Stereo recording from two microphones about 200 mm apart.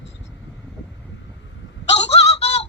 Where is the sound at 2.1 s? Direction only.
30° left (ahead or behind).